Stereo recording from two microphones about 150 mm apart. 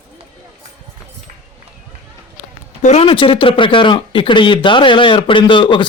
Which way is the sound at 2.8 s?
50° left (ahead or behind).